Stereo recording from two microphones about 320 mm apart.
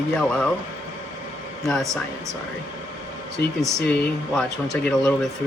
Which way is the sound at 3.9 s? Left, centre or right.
Centre.